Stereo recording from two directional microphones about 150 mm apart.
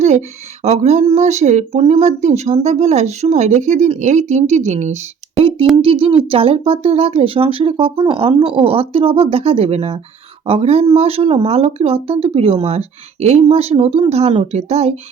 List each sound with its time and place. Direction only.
0.0 s speech: 50° right (ahead or behind)
5.4 s a sound: 35° right (ahead or behind)
5.8 s speech: 40° right (ahead or behind)